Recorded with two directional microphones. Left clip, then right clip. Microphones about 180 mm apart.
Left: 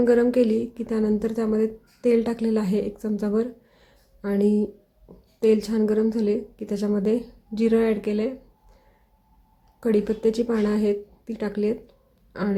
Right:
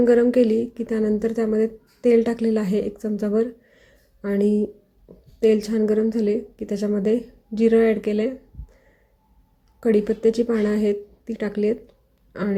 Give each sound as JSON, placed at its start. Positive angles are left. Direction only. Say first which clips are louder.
{"t": 0.0, "sound": "a woman's voice", "louder": "right 2 dB", "side_deg": -5}
{"t": 9.8, "sound": "speech", "louder": "right 3 dB", "side_deg": -5}